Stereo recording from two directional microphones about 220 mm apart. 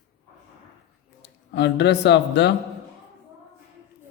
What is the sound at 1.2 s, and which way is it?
Speech, 50° left (ahead or behind).